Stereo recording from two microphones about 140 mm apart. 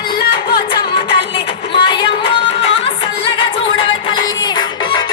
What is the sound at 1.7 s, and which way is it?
Music, 35° left (ahead or behind).